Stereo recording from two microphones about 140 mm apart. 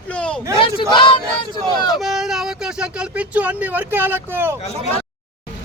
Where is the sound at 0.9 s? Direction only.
35° left (ahead or behind).